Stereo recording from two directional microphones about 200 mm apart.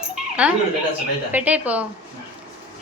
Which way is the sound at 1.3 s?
5° right (ahead or behind).